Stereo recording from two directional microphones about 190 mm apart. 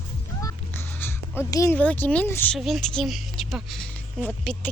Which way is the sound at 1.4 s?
15° left (ahead or behind).